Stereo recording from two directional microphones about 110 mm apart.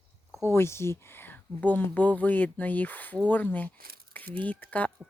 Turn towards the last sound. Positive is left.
turn(degrees=15)  # may be behind; listen again after turning